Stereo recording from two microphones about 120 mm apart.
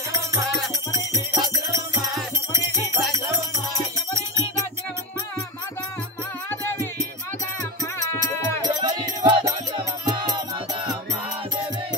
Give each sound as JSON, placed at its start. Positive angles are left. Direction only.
{"t": 0.9, "sound": "music", "side_deg": -25}
{"t": 3.0, "sound": "music", "side_deg": 0}
{"t": 6.5, "sound": "music", "side_deg": 15}
{"t": 8.6, "sound": "music", "side_deg": -35}